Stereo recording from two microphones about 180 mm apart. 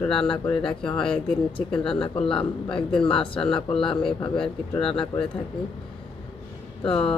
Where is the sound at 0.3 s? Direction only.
5° left (ahead or behind).